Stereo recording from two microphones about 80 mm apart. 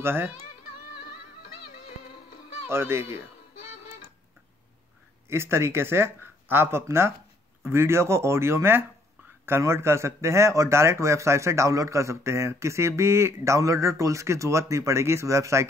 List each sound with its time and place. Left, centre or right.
0.0 s speech: right
2.7 s speech: right
5.3 s speech: right